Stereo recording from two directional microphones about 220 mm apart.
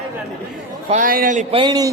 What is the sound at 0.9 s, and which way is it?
Speech, 40° right (ahead or behind).